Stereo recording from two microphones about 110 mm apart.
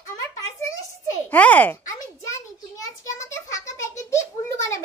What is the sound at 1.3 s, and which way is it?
Speech, 15° left (ahead or behind).